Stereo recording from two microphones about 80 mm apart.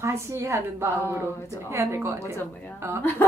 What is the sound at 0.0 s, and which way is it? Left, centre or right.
A woman's voice, right.